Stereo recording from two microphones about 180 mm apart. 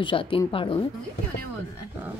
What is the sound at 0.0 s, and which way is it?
Speech, 30° left (ahead or behind).